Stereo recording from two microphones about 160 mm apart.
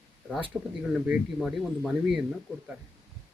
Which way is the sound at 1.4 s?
Centre (ahead or behind).